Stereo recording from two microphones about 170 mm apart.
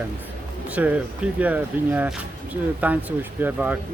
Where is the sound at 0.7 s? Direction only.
10° right (ahead or behind).